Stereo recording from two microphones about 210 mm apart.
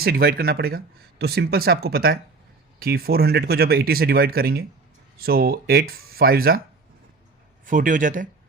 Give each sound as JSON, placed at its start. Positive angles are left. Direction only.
{"t": 0.0, "sound": "speech", "side_deg": -45}
{"t": 7.6, "sound": "a man's voice", "side_deg": -40}